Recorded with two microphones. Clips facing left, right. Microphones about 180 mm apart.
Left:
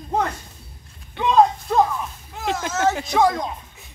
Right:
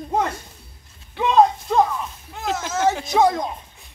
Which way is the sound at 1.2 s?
Centre (ahead or behind).